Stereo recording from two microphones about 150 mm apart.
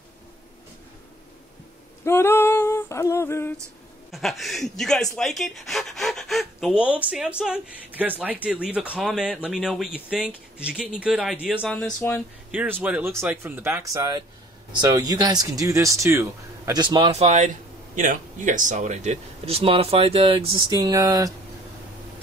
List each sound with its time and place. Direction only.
2.0 s female singing: 15° left (ahead or behind)
4.1 s speech: centre (ahead or behind)
11.6 s speech: 5° left (ahead or behind)
12.4 s speech: 10° right (ahead or behind); by 17.1 s 30° right (ahead or behind)
17.1 s speech: 50° right (ahead or behind)
17.9 s speech: 60° right (ahead or behind); by 21.3 s 25° right (ahead or behind)